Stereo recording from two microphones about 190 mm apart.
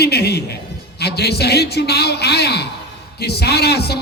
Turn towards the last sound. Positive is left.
turn(degrees=60)  # may be behind; listen again after turning